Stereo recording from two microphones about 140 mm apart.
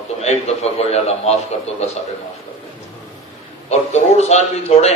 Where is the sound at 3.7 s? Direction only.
50° left (ahead or behind).